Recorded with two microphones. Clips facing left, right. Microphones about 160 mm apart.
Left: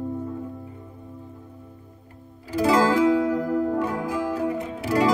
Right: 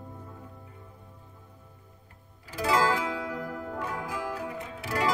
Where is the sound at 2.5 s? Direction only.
40° left (ahead or behind).